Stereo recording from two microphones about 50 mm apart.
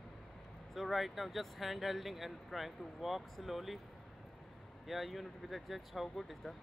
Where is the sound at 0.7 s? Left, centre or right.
Centre.